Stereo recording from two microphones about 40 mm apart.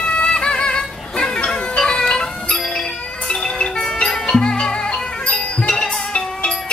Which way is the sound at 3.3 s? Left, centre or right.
Centre.